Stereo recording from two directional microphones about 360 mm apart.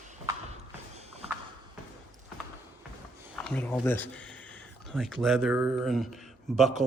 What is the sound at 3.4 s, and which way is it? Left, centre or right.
Speech, centre.